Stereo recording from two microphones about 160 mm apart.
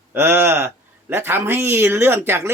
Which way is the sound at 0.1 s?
15° right (ahead or behind).